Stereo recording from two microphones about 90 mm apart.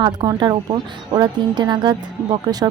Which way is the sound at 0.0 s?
55° right (ahead or behind).